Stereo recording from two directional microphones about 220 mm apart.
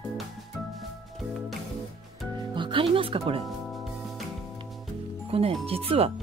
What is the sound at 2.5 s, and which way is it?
Speech, 20° right (ahead or behind).